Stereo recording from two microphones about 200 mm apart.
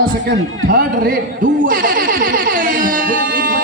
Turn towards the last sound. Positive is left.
turn(degrees=-45)  # may be behind; listen again after turning